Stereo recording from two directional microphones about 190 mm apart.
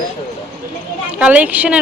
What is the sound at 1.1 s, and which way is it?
Speech, 5° right (ahead or behind).